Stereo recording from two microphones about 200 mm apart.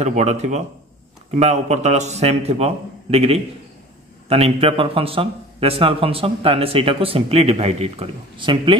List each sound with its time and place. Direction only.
0.0 s a man's voice: 35° right (ahead or behind)